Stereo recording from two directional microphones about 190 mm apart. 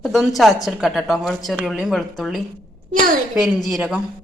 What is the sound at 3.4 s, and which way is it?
Speech, centre (ahead or behind).